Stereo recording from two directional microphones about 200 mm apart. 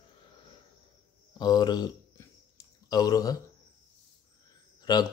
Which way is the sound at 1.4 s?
20° left (ahead or behind).